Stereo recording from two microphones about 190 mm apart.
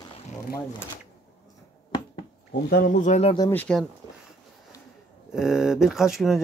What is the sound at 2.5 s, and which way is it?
Speech, 55° left (ahead or behind).